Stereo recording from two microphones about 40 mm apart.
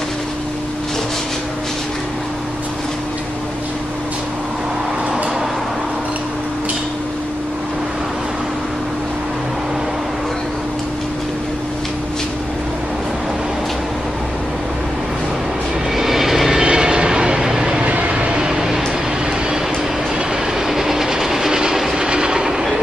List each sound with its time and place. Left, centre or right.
16.0 s vehicle: centre
16.6 s train: right
17.8 s vehicle: right
18.4 s a sound: centre
20.6 s train: centre